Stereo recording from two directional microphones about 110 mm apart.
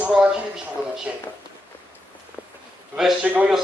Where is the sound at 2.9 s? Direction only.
5° right (ahead or behind).